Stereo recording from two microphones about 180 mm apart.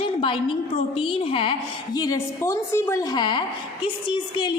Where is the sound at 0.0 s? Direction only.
30° left (ahead or behind).